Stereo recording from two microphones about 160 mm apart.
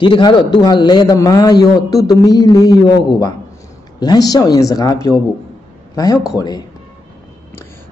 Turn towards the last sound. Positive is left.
turn(degrees=25)  # may be behind; listen again after turning